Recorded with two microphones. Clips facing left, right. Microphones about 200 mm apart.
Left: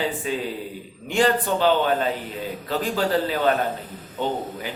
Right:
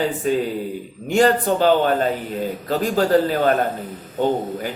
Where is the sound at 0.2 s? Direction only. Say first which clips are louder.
Right 7 dB; 45° right (ahead or behind).